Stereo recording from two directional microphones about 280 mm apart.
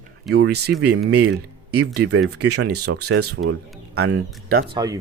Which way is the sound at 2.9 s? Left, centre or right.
Right.